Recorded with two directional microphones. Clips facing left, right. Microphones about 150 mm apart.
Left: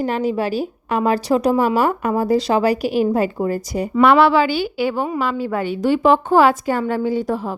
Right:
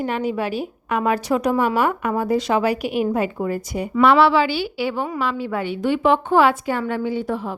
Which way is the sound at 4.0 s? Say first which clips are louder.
Left 2 dB; 55° left (ahead or behind).